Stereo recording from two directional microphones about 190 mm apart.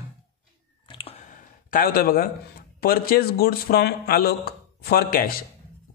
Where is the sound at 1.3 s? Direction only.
50° left (ahead or behind).